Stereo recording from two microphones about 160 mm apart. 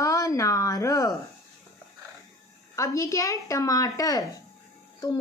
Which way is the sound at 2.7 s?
20° left (ahead or behind).